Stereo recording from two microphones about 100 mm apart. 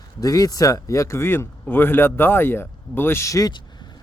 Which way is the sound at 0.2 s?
35° left (ahead or behind).